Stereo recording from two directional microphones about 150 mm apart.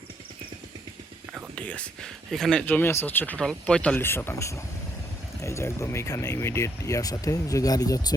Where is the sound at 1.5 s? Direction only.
10° left (ahead or behind).